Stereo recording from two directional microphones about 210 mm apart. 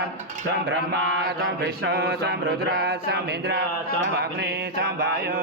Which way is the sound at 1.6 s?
50° right (ahead or behind).